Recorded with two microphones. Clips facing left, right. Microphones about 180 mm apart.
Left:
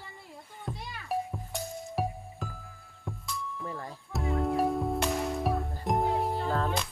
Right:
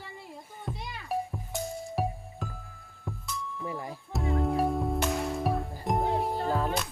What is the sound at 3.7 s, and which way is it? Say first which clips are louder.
Music: right 5 dB; 10° right (ahead or behind).